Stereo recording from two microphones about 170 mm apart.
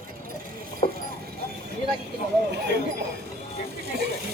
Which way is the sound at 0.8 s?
50° left (ahead or behind).